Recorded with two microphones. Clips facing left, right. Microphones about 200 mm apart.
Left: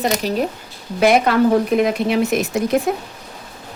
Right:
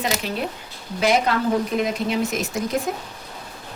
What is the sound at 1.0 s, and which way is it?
Speech, 60° left (ahead or behind).